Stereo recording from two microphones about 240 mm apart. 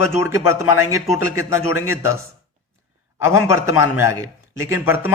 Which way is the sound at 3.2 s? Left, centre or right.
Centre.